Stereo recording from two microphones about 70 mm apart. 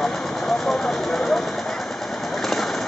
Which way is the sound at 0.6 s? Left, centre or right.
Centre.